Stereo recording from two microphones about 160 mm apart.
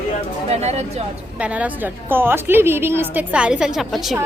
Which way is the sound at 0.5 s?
45° right (ahead or behind).